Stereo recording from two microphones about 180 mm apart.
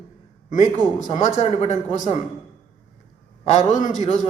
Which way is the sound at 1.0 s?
40° left (ahead or behind).